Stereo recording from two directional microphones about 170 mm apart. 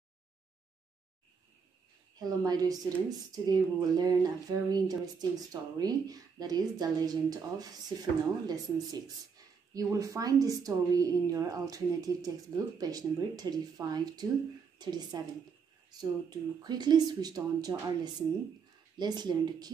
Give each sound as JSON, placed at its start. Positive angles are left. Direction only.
{"t": 2.1, "sound": "speech", "side_deg": -20}